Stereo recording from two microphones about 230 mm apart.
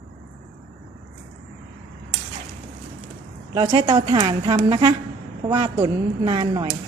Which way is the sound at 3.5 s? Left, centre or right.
Centre.